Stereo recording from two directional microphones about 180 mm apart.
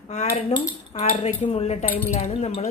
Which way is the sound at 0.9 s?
35° left (ahead or behind).